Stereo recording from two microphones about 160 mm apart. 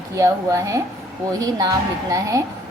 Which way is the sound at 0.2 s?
20° right (ahead or behind).